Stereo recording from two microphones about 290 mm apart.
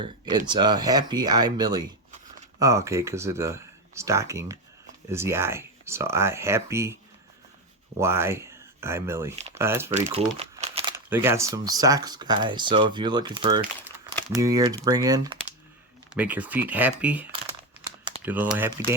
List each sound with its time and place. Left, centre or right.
0.0 s speech: centre
7.9 s speech: centre
9.9 s crumpling: right
10.9 s speech: centre